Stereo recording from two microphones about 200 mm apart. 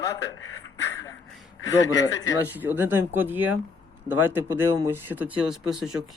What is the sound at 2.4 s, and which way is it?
Speech, 10° right (ahead or behind).